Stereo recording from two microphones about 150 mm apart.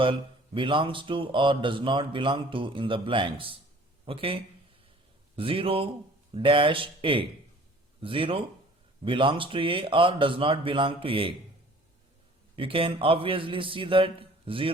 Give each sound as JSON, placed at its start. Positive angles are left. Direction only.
{"t": 0.0, "sound": "speech", "side_deg": -35}
{"t": 5.4, "sound": "speech", "side_deg": -35}
{"t": 12.5, "sound": "speech", "side_deg": -35}